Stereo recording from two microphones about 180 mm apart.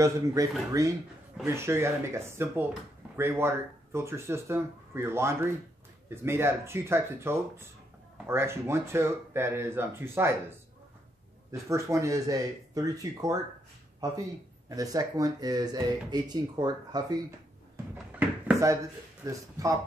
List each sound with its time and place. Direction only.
0.0 s speech: 20° right (ahead or behind)
11.5 s speech: 15° right (ahead or behind)
19.2 s speech: 20° right (ahead or behind)